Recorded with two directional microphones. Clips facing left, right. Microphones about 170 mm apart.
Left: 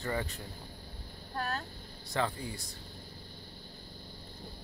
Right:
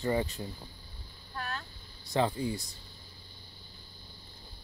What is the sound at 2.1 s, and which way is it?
Speech, 20° right (ahead or behind).